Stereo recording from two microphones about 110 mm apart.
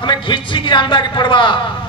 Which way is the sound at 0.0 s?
45° left (ahead or behind).